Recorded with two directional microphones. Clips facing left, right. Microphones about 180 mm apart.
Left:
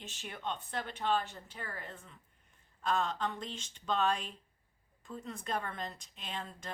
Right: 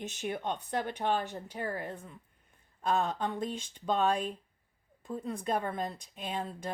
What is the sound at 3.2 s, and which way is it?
Speech, 55° right (ahead or behind).